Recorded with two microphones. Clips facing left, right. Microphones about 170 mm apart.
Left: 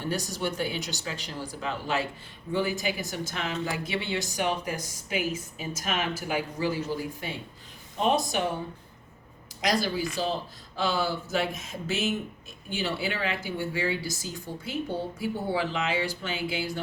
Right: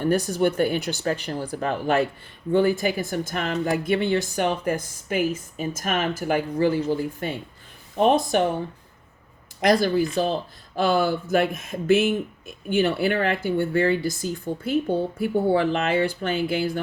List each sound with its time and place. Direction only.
0.0 s speech: 50° right (ahead or behind)
9.6 s speech: 55° right (ahead or behind)